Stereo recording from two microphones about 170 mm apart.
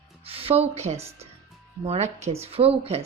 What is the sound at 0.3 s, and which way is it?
A woman's voice, 35° right (ahead or behind).